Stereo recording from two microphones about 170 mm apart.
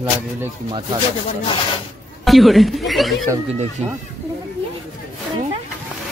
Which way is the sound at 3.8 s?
40° right (ahead or behind).